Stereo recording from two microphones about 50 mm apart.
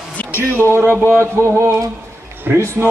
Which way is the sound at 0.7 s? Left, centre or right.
Right.